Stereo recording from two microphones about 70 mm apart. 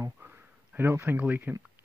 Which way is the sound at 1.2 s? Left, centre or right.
Right.